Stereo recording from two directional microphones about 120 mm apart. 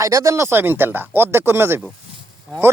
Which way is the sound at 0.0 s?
25° right (ahead or behind).